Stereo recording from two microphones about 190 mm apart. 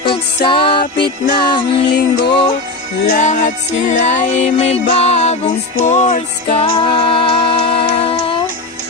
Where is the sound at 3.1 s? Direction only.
40° left (ahead or behind).